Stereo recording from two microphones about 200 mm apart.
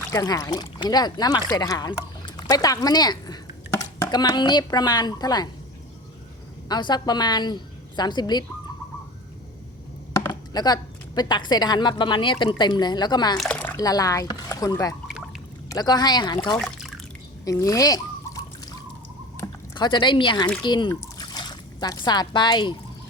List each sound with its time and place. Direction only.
0.1 s speech: 15° left (ahead or behind)
6.7 s a woman's voice: 20° left (ahead or behind)
10.1 s speech: 20° left (ahead or behind)
13.3 s speech: 5° left (ahead or behind)
13.7 s a woman's voice: 20° left (ahead or behind)
16.6 s a sound: centre (ahead or behind)
17.4 s a sound: 15° left (ahead or behind)
19.7 s a woman's voice: 25° left (ahead or behind)